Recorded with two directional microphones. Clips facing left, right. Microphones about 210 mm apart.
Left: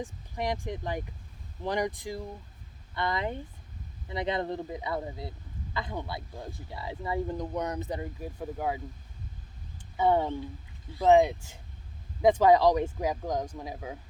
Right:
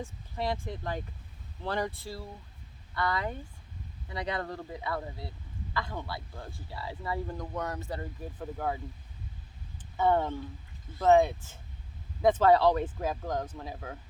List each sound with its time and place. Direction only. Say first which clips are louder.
0.0 s speech: left 1 dB; 15° left (ahead or behind)
10.0 s speech: left 1 dB; 15° left (ahead or behind)